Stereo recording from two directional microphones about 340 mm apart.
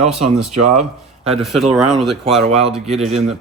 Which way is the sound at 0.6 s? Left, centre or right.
Centre.